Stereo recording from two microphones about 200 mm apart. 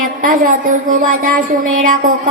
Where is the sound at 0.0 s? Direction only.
45° right (ahead or behind).